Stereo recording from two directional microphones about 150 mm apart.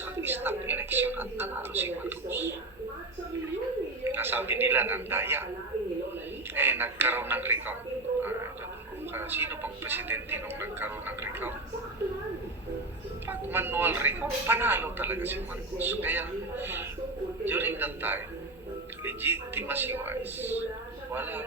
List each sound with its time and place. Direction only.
0.0 s a woman's voice: 15° right (ahead or behind)
4.1 s speech: 15° right (ahead or behind)
6.5 s speech: 15° right (ahead or behind)
9.1 s speech: 15° right (ahead or behind)
13.2 s speech: 15° right (ahead or behind)